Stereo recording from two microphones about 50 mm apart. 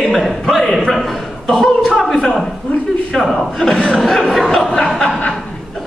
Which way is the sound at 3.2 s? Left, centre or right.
Centre.